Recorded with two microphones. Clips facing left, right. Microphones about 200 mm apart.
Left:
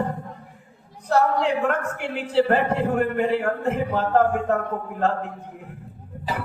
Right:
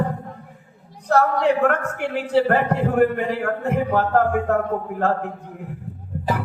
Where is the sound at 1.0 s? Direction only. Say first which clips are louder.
Right 2 dB; 60° right (ahead or behind).